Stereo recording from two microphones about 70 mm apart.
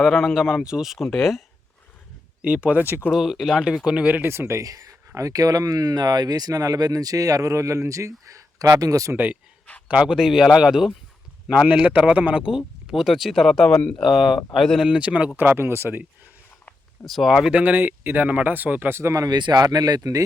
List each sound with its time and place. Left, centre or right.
0.0 s speech: centre
2.4 s speech: centre
3.1 s speech: centre; by 4.3 s right
4.3 s speech: right
4.6 s speech: right
9.1 s speech: right; by 10.9 s centre
11.4 s speech: centre
12.5 s speech: centre
14.8 s speech: centre
15.4 s speech: right
17.1 s speech: centre
17.5 s speech: right
18.9 s speech: right
19.3 s speech: right